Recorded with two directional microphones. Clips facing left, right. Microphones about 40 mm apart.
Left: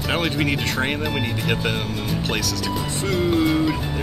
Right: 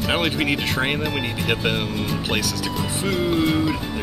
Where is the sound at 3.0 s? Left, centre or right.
Centre.